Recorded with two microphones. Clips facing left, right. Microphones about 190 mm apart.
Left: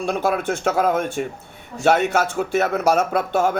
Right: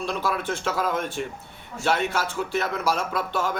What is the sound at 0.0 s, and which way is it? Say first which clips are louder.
Speech: left 6 dB; 50° left (ahead or behind).